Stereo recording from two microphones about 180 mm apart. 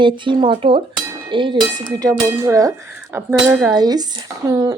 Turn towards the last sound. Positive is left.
turn(degrees=-20)  # may be behind; listen again after turning